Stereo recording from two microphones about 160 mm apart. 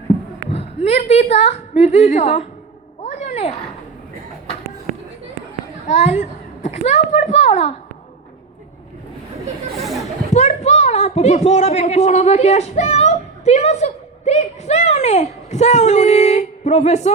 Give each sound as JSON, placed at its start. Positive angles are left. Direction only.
{"t": 0.5, "sound": "a woman's voice", "side_deg": 40}
{"t": 3.0, "sound": "a sound", "side_deg": 40}
{"t": 5.9, "sound": "a child's voice", "side_deg": 45}
{"t": 10.3, "sound": "a child's voice", "side_deg": 45}